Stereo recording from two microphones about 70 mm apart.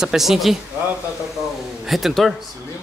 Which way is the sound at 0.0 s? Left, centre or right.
Centre.